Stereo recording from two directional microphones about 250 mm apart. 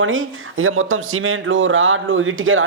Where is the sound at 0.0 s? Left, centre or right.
Right.